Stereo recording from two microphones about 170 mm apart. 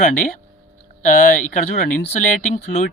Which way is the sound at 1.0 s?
50° left (ahead or behind).